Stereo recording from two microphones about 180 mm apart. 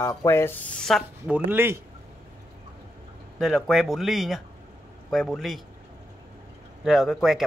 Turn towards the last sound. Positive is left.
turn(degrees=0)  # may be behind; listen again after turning